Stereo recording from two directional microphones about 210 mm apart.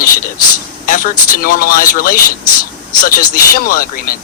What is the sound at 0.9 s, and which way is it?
A man's voice, 40° left (ahead or behind).